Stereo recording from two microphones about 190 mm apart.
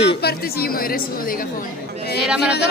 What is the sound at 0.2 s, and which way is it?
A woman's voice, 55° left (ahead or behind).